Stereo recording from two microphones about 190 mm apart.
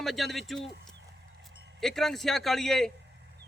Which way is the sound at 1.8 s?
Centre (ahead or behind).